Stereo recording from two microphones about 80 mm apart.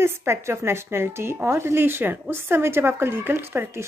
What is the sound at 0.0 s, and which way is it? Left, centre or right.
A woman's voice, right.